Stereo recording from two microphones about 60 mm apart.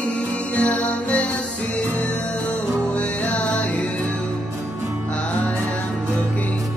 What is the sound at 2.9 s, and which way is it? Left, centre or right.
Music, left.